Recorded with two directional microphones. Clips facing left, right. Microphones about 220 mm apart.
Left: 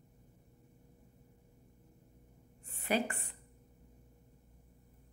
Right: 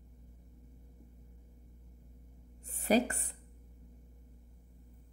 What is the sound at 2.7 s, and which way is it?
Speech, 40° right (ahead or behind).